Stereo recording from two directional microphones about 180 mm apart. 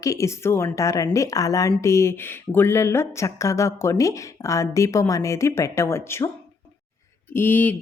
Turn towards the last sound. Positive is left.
turn(degrees=10)  # may be behind; listen again after turning